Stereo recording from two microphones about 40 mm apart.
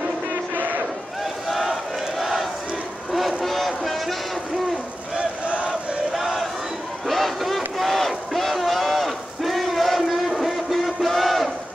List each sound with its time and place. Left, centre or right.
1.5 s battle cry: centre
3.1 s vehicle: centre
5.5 s battle cry: right
6.1 s battle cry: centre
7.1 s a sound: centre